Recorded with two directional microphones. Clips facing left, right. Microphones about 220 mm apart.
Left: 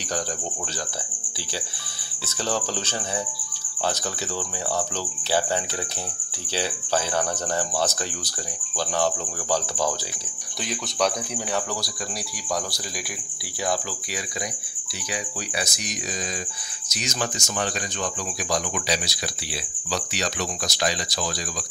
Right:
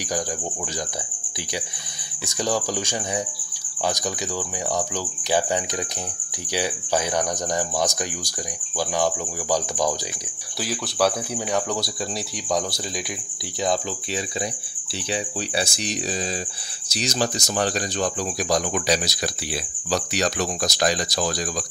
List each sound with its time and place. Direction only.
2.2 s speech: 15° right (ahead or behind)
6.5 s speech: 15° right (ahead or behind)
15.0 s speech: 30° right (ahead or behind)